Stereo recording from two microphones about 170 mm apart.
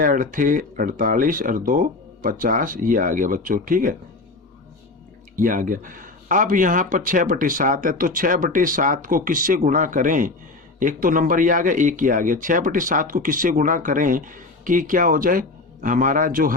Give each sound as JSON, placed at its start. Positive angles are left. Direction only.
{"t": 0.0, "sound": "speech", "side_deg": -50}
{"t": 5.4, "sound": "speech", "side_deg": -50}